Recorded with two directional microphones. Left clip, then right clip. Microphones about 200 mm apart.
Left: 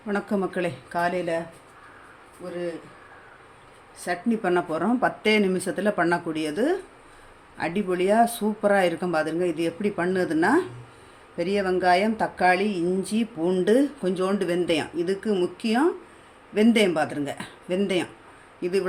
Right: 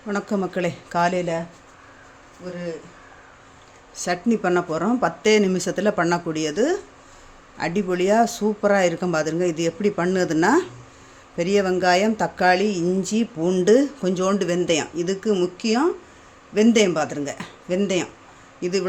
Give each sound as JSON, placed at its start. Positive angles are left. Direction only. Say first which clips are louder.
{"t": 0.1, "sound": "speech", "louder": "right 2 dB", "side_deg": -10}
{"t": 0.9, "sound": "speech", "louder": "right 5 dB", "side_deg": -35}
{"t": 3.9, "sound": "speech", "louder": "right 4 dB", "side_deg": -40}
{"t": 4.4, "sound": "speech", "louder": "right 1 dB", "side_deg": -15}